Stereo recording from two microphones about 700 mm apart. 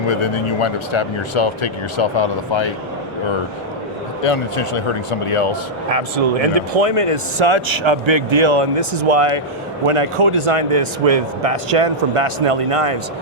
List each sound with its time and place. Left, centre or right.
0.1 s speech: left
4.2 s speech: left
5.9 s speech: right